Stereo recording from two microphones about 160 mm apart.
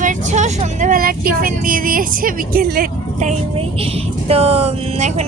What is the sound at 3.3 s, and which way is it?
Speech, 35° right (ahead or behind).